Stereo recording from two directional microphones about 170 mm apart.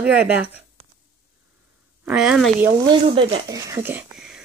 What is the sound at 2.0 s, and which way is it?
Speech, 5° right (ahead or behind).